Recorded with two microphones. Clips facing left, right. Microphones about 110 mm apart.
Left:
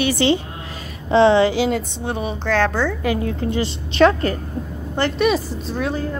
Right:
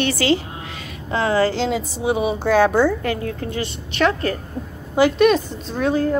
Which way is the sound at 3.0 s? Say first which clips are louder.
Left 3 dB; 15° left (ahead or behind).